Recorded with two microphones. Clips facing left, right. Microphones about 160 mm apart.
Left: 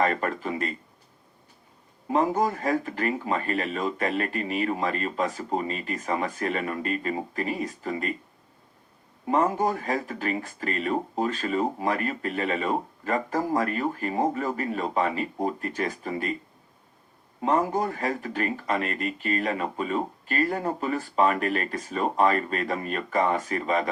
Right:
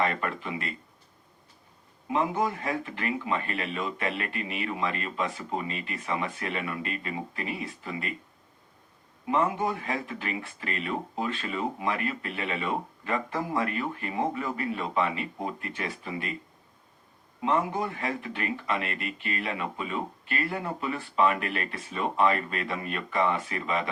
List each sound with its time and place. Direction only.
0.0 s speech: 40° left (ahead or behind)
2.0 s speech: 40° left (ahead or behind)
9.2 s speech: 40° left (ahead or behind)
17.4 s speech: 40° left (ahead or behind)